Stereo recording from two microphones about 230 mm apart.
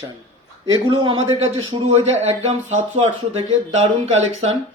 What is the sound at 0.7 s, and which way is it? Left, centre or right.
Speech, centre.